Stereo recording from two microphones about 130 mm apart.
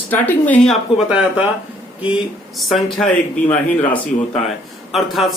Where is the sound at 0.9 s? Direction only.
10° right (ahead or behind).